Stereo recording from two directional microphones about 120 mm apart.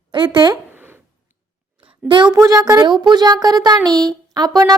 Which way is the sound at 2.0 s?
40° right (ahead or behind).